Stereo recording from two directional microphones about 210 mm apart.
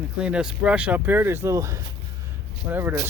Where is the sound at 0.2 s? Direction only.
5° right (ahead or behind).